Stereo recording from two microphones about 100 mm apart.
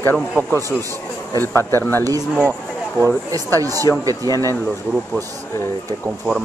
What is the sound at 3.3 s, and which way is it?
Speech, 35° right (ahead or behind).